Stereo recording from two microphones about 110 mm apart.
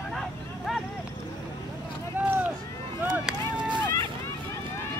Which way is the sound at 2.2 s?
20° right (ahead or behind).